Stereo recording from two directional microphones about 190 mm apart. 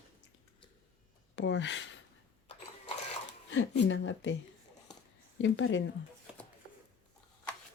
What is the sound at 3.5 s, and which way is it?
Speech, 75° left (ahead or behind).